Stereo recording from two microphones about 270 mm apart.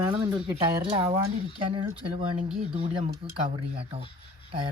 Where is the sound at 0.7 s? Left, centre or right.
Centre.